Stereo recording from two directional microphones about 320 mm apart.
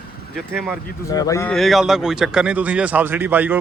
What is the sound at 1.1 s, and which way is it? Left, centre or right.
Speech, centre.